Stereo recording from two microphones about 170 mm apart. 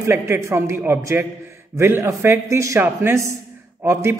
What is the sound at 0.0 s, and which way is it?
A man's voice, 15° right (ahead or behind).